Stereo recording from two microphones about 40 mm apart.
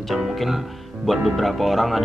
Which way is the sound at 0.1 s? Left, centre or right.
Centre.